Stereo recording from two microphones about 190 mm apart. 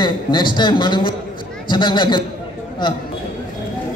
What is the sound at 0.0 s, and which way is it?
A man's voice, 25° left (ahead or behind).